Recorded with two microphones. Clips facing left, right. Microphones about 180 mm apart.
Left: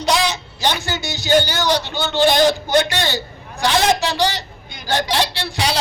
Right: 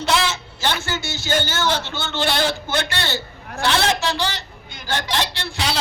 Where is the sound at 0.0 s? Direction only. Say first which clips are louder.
Left 2 dB; 15° left (ahead or behind).